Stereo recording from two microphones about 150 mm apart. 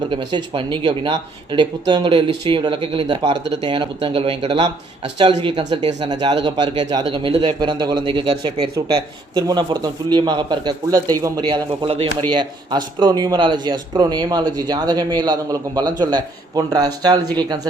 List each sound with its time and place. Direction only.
0.1 s speech: 30° right (ahead or behind)